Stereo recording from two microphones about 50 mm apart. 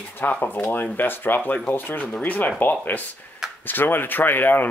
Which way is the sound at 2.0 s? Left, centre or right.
Left.